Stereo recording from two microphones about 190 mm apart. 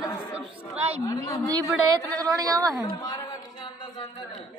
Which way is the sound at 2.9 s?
20° left (ahead or behind).